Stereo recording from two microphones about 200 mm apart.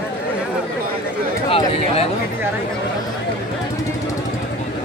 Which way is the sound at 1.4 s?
30° left (ahead or behind).